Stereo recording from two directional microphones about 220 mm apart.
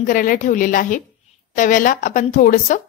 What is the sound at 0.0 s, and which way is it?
A woman's voice, 40° left (ahead or behind).